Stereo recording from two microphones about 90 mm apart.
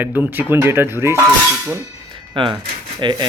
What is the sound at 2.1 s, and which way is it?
Music, 65° right (ahead or behind).